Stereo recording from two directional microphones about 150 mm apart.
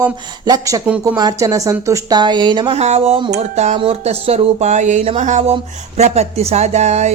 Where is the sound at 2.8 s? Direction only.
45° right (ahead or behind).